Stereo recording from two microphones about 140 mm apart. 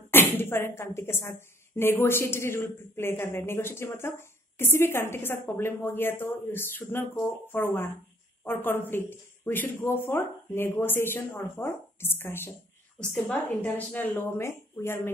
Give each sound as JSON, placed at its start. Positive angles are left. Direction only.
{"t": 0.1, "sound": "speech", "side_deg": 15}
{"t": 13.5, "sound": "speech", "side_deg": 15}